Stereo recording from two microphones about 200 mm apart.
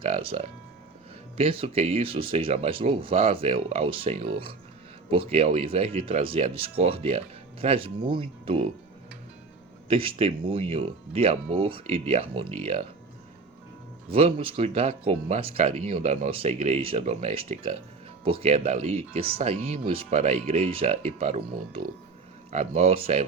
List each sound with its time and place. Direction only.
0.0 s music: 30° right (ahead or behind)
1.4 s speech: 30° right (ahead or behind)
9.9 s speech: 30° right (ahead or behind)
14.1 s speech: 30° right (ahead or behind)